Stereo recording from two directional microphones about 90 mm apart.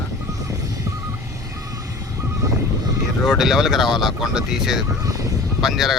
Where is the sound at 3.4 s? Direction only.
5° right (ahead or behind).